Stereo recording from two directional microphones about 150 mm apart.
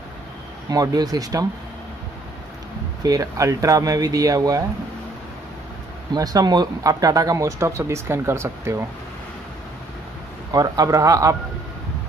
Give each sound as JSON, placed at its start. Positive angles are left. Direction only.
{"t": 0.7, "sound": "speech", "side_deg": -25}
{"t": 3.0, "sound": "speech", "side_deg": -25}
{"t": 6.1, "sound": "speech", "side_deg": -25}
{"t": 10.5, "sound": "speech", "side_deg": -25}